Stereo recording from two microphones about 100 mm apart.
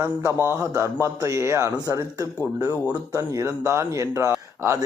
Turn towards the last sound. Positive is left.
turn(degrees=-30)  # may be behind; listen again after turning